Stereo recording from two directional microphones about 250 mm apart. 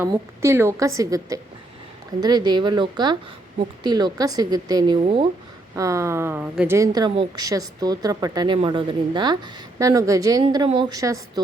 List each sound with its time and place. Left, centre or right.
0.0 s a woman's voice: centre